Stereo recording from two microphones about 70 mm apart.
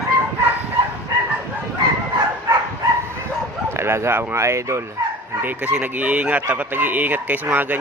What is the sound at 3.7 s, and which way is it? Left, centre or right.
Speech, right.